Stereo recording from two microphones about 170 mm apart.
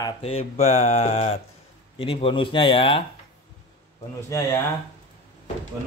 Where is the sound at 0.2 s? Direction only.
35° left (ahead or behind).